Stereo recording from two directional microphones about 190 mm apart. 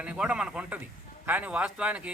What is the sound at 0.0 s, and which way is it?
Speech, 5° right (ahead or behind).